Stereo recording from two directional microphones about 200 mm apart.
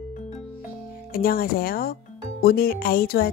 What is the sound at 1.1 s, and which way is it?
Speech, 45° left (ahead or behind).